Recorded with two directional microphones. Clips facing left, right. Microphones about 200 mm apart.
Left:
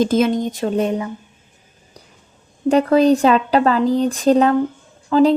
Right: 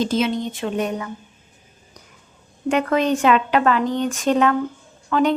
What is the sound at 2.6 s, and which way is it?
Speech, 35° left (ahead or behind).